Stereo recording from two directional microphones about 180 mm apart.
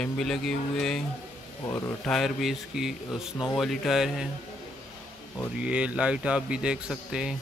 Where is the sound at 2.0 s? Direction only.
Centre (ahead or behind).